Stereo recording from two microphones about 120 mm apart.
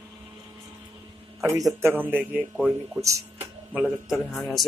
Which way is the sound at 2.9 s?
25° right (ahead or behind).